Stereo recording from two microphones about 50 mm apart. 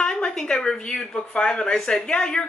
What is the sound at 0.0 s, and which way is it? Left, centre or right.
A man's voice, centre.